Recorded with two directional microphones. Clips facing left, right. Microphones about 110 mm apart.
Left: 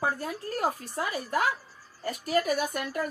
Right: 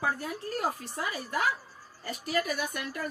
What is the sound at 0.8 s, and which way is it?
A woman's voice, 40° left (ahead or behind).